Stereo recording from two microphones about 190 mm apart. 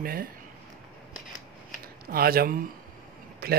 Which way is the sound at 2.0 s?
50° right (ahead or behind).